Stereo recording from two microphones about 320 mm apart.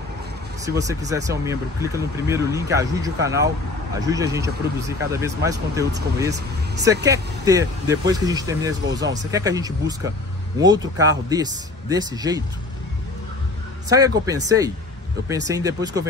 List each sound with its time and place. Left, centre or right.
0.7 s speech: centre
5.9 s speech: right
7.1 s speech: centre
13.8 s speech: centre